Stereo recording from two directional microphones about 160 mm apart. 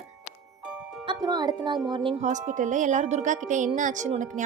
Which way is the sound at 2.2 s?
50° right (ahead or behind).